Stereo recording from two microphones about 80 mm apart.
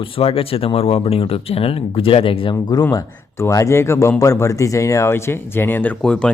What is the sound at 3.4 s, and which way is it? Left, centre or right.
Speech, left.